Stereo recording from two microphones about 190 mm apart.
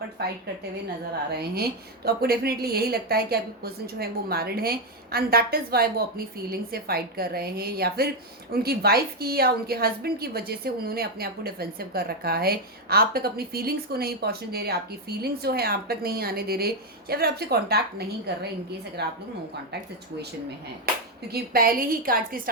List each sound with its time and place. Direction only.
0.2 s a woman's voice: 55° right (ahead or behind)
21.2 s a woman's voice: 55° right (ahead or behind)